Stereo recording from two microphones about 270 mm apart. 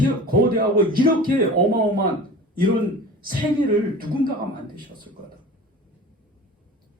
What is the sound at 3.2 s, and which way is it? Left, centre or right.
Speech, right.